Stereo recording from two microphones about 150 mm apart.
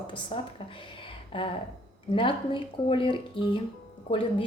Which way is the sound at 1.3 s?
35° left (ahead or behind).